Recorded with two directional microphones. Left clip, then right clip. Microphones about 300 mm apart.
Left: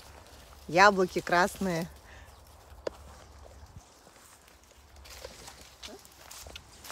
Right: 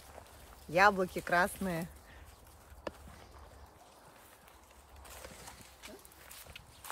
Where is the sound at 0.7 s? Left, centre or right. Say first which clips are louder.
Left 5 dB; left.